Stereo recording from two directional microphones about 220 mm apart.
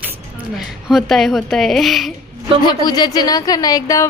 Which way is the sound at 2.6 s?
20° left (ahead or behind).